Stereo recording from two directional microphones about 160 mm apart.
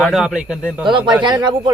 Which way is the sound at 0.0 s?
Centre (ahead or behind).